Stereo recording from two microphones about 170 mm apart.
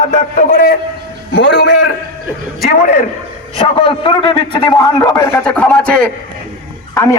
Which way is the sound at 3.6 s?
30° left (ahead or behind).